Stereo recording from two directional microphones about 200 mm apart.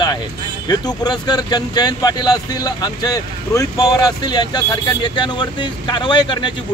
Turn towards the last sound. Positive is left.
turn(degrees=25)  # may be behind; listen again after turning